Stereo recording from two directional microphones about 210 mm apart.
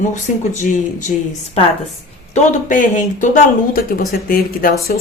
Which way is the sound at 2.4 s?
40° left (ahead or behind).